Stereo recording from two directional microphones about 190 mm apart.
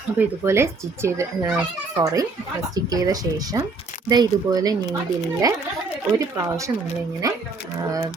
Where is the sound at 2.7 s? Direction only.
20° right (ahead or behind).